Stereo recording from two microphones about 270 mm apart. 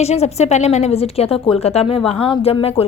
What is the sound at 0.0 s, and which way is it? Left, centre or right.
A woman's voice, left.